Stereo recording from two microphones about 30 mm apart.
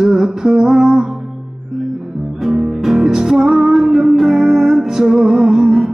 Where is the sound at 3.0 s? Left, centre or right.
Centre.